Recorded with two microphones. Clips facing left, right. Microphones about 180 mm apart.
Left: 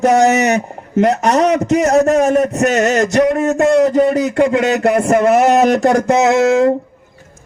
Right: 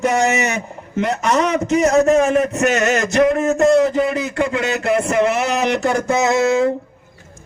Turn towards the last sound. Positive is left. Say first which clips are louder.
# left 4 dB
turn(degrees=50)  # may be behind; listen again after turning